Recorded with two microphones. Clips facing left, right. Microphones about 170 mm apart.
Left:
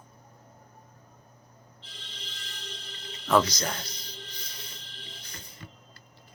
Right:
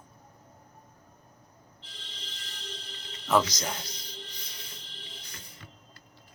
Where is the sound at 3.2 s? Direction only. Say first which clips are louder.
Left 2 dB; 5° right (ahead or behind).